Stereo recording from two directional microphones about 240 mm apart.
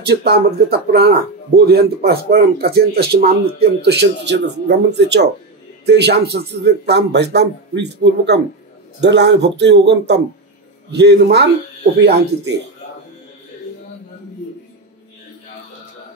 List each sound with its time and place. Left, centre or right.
0.0 s a man's voice: right